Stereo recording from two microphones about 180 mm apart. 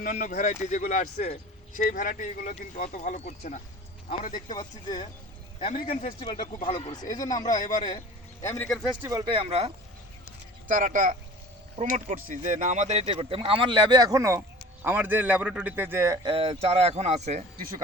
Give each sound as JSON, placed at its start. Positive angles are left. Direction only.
{"t": 0.0, "sound": "speech", "side_deg": 45}
{"t": 4.4, "sound": "a man's voice", "side_deg": 25}
{"t": 5.9, "sound": "speech", "side_deg": 50}
{"t": 6.7, "sound": "a man's voice", "side_deg": 30}
{"t": 9.0, "sound": "speech", "side_deg": -20}
{"t": 10.7, "sound": "speech", "side_deg": -45}
{"t": 16.2, "sound": "speech", "side_deg": -30}